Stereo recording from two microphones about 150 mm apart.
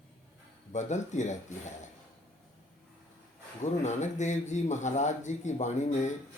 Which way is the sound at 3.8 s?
50° left (ahead or behind).